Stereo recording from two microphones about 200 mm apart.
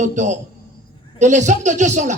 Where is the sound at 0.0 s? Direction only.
35° right (ahead or behind).